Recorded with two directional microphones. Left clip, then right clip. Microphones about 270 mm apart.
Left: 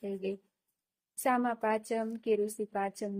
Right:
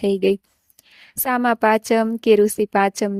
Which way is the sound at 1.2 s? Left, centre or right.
Right.